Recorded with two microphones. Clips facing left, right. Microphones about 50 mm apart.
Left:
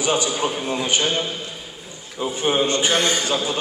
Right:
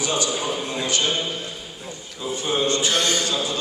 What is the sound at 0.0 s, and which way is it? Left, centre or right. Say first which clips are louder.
A man's voice: left 3 dB; left.